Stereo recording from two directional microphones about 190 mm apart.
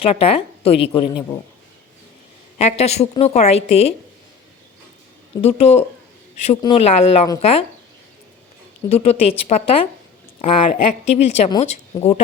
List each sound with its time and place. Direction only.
0.0 s a woman's voice: 30° left (ahead or behind)
2.6 s a woman's voice: 35° left (ahead or behind)
5.4 s a woman's voice: 35° left (ahead or behind)
8.9 s a woman's voice: 35° left (ahead or behind)